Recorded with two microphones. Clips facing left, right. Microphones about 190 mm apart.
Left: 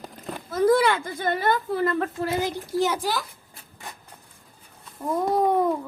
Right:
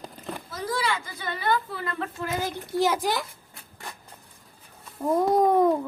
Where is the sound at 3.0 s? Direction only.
20° right (ahead or behind).